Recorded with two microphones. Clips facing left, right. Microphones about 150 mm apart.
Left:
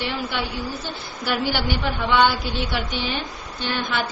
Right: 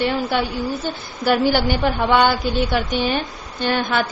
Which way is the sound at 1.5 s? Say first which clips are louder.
Right 6 dB; 45° right (ahead or behind).